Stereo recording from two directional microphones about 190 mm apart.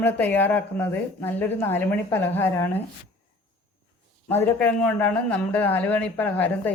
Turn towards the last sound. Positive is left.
turn(degrees=10)  # may be behind; listen again after turning